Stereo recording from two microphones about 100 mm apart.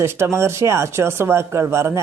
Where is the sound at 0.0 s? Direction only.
25° right (ahead or behind).